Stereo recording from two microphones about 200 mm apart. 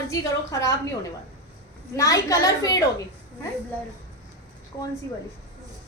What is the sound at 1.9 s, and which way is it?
Speech, 15° left (ahead or behind).